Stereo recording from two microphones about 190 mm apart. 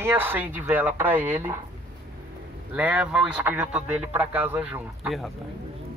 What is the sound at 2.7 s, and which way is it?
Speech, 5° right (ahead or behind).